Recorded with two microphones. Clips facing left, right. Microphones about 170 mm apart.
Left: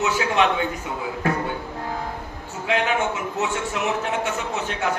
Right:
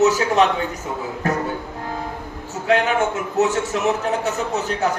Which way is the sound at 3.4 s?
40° right (ahead or behind).